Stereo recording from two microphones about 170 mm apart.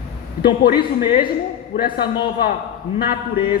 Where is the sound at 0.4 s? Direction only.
65° left (ahead or behind).